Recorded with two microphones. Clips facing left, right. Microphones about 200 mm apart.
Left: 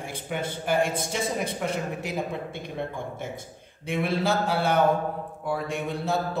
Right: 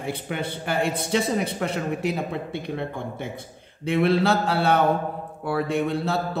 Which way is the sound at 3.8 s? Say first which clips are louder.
Right 6 dB; 65° right (ahead or behind).